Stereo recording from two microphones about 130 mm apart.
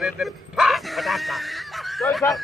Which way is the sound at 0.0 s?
Centre (ahead or behind).